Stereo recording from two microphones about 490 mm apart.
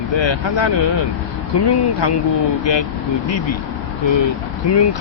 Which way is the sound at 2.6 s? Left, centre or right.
Left.